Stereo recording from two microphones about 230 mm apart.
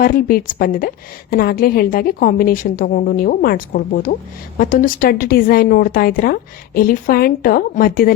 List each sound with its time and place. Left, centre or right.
0.0 s a woman's voice: left